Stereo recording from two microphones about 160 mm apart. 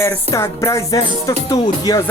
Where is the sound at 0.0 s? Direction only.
20° left (ahead or behind).